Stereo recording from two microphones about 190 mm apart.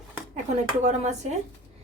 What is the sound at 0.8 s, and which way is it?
Speech, 35° right (ahead or behind).